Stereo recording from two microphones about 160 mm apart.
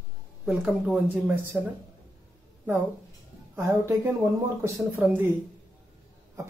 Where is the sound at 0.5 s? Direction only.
5° right (ahead or behind).